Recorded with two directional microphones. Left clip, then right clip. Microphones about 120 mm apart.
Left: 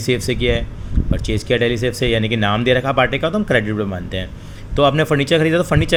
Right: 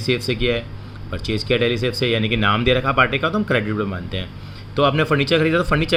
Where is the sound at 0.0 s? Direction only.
40° left (ahead or behind).